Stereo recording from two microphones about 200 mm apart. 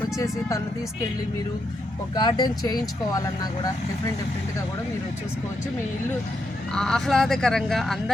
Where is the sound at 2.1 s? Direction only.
20° left (ahead or behind).